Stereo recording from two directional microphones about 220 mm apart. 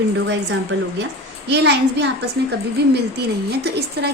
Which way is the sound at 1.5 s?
50° right (ahead or behind).